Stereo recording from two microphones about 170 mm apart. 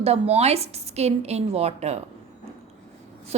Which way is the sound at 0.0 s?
35° right (ahead or behind).